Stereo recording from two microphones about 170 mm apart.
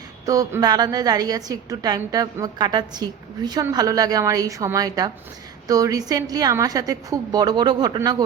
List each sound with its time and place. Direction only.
0.3 s a woman's voice: 20° right (ahead or behind)